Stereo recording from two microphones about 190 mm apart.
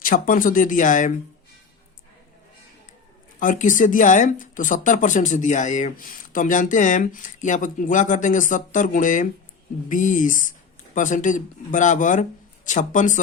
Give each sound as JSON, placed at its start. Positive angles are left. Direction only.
{"t": 0.0, "sound": "speech", "side_deg": 50}
{"t": 3.4, "sound": "speech", "side_deg": 45}